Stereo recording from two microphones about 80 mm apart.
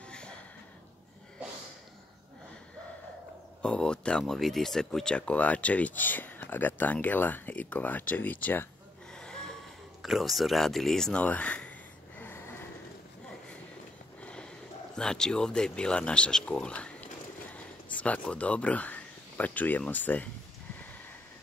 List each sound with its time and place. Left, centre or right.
0.0 s a sound: centre
3.6 s speech: centre
9.1 s snort: centre
10.0 s speech: centre
11.2 s speech: centre
12.2 s snort: left
14.2 s sniff: centre
15.0 s speech: centre